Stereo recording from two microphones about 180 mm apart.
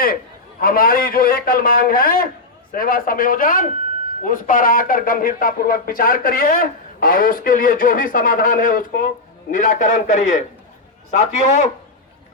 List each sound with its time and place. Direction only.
0.6 s a man's voice: 55° left (ahead or behind)